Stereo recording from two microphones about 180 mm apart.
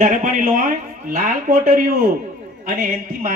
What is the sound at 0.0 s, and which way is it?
A man's voice, 45° right (ahead or behind).